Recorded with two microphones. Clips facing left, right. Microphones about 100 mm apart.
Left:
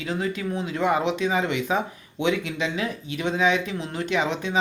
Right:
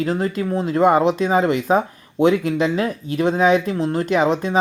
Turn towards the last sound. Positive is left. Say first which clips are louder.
# right 7 dB
turn(degrees=-40)  # may be behind; listen again after turning